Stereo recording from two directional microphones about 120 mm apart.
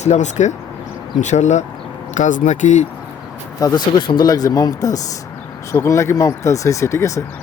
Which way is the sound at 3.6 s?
35° left (ahead or behind).